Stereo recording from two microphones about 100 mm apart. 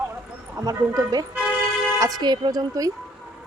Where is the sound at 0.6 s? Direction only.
35° right (ahead or behind).